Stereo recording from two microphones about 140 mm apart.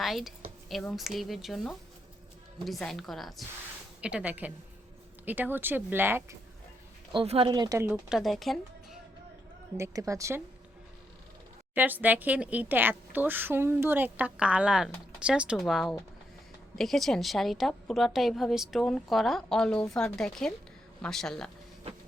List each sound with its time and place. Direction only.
0.0 s a woman's voice: centre (ahead or behind)
7.1 s speech: 40° right (ahead or behind)
7.5 s speech: 25° right (ahead or behind)
7.9 s speech: 5° right (ahead or behind)
9.7 s speech: 20° right (ahead or behind)
11.7 s a woman's voice: 10° right (ahead or behind); by 21.5 s 5° left (ahead or behind)